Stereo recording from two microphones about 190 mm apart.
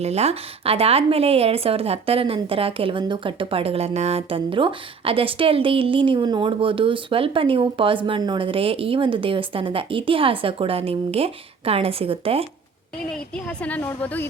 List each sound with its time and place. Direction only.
0.0 s speech: 35° right (ahead or behind)
13.3 s a woman's voice: 5° left (ahead or behind)